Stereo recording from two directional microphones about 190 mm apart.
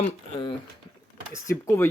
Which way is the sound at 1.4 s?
15° left (ahead or behind).